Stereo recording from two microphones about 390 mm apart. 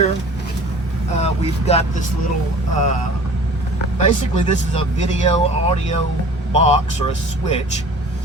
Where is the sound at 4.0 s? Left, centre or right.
Centre.